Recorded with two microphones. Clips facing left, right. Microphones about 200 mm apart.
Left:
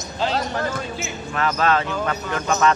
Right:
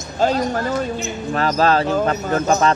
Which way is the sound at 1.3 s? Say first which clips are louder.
Right 4 dB; 35° right (ahead or behind).